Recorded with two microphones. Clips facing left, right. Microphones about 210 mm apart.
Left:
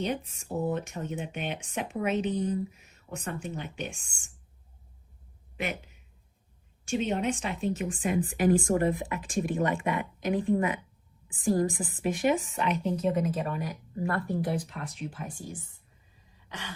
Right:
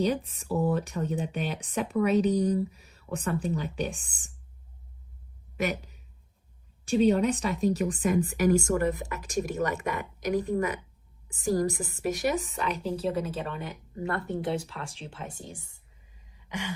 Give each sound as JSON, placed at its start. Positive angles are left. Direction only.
{"t": 0.0, "sound": "speech", "side_deg": -35}
{"t": 5.5, "sound": "a woman's voice", "side_deg": -40}
{"t": 16.3, "sound": "a sound", "side_deg": -10}